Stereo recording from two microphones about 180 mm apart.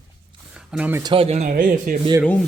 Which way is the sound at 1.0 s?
25° right (ahead or behind).